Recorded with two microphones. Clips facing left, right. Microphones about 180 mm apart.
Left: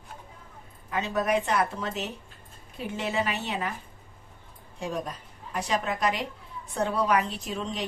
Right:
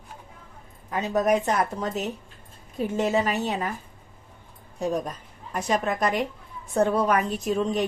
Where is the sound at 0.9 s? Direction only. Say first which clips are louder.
Right 4 dB; 40° right (ahead or behind).